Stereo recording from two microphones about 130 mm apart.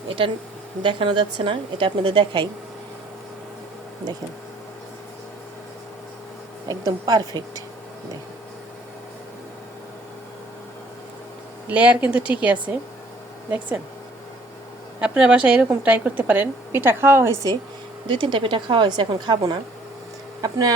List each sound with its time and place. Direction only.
0.8 s a woman's voice: 40° right (ahead or behind)
6.7 s a woman's voice: 30° right (ahead or behind)
11.7 s a woman's voice: 10° right (ahead or behind)
15.0 s a woman's voice: 10° right (ahead or behind); by 17.6 s 25° right (ahead or behind)
18.1 s a woman's voice: 40° right (ahead or behind)